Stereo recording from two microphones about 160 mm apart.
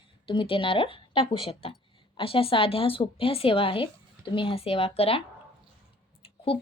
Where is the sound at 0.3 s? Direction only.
30° left (ahead or behind).